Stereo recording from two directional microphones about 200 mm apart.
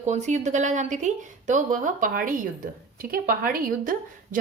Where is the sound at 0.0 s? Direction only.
35° right (ahead or behind).